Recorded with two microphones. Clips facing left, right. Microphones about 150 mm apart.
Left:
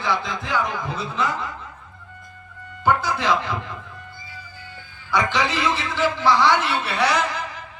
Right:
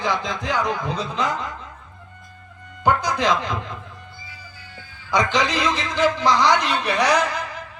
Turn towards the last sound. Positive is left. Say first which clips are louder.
# right 2 dB
turn(degrees=-15)  # may be behind; listen again after turning